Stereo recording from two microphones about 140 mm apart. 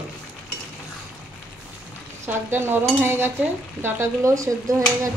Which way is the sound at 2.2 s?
15° right (ahead or behind).